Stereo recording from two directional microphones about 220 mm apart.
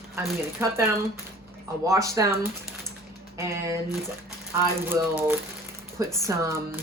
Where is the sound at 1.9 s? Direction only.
15° right (ahead or behind).